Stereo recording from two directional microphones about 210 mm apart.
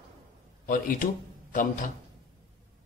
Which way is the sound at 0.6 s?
40° left (ahead or behind).